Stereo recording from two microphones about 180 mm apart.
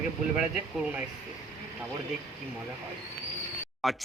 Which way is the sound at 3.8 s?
Centre (ahead or behind).